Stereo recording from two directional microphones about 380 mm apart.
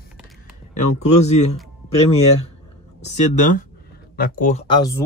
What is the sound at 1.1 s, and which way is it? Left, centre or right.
Speech, centre.